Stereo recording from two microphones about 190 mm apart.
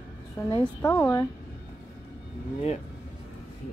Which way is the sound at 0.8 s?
15° left (ahead or behind).